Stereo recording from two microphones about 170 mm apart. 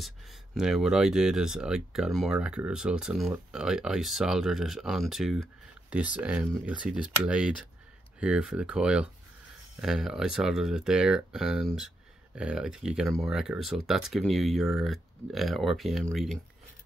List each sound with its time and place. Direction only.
0.0 s speech: centre (ahead or behind)